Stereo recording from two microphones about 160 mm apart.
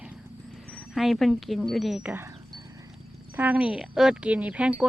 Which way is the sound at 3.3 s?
10° right (ahead or behind).